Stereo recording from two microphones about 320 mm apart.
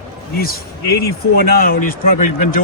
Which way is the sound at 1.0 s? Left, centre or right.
Left.